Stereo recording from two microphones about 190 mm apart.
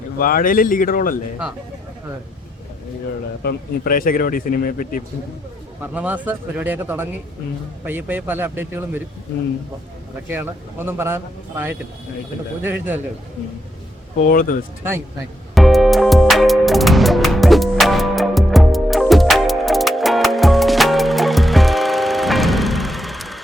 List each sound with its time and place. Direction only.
0.2 s speech: 50° left (ahead or behind)
3.4 s speech: 50° left (ahead or behind)
5.8 s a man's voice: 10° right (ahead or behind)
10.2 s a man's voice: 10° right (ahead or behind)
14.3 s speech: 45° left (ahead or behind)
15.5 s music: centre (ahead or behind)